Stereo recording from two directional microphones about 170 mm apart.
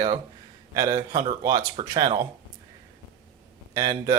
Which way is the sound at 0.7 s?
20° right (ahead or behind).